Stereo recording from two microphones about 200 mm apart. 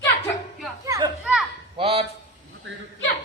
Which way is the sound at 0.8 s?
15° right (ahead or behind).